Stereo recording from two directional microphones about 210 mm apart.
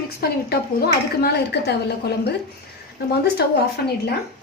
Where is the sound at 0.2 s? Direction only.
50° left (ahead or behind).